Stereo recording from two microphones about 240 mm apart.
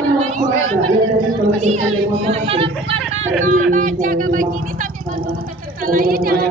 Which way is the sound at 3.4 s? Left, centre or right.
Right.